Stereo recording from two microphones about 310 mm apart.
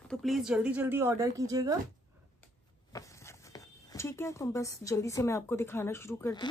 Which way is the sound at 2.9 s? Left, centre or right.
Centre.